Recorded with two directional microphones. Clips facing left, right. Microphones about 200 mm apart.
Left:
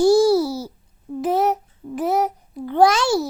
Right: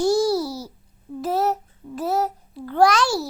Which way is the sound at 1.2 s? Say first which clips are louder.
Left 3 dB; 20° left (ahead or behind).